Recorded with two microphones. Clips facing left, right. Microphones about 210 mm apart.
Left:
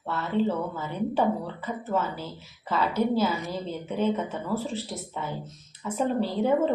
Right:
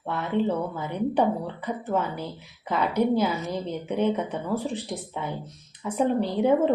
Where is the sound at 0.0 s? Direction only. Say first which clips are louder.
Right 1 dB; 15° right (ahead or behind).